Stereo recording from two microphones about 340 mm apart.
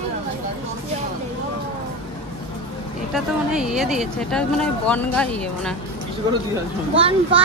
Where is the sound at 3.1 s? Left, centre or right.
Centre.